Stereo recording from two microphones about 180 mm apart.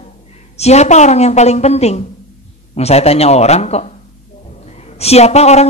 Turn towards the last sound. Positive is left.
turn(degrees=35)  # may be behind; listen again after turning